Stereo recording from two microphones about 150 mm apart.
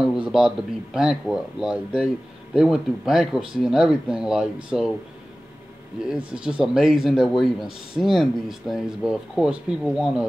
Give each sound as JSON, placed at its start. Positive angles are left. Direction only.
{"t": 0.0, "sound": "speech", "side_deg": -5}
{"t": 6.0, "sound": "speech", "side_deg": -5}